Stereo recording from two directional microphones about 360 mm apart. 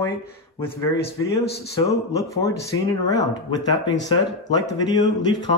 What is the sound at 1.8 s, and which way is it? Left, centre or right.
Speech, centre.